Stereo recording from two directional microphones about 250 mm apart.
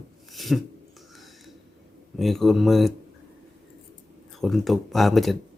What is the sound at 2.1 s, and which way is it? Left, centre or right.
Speech, centre.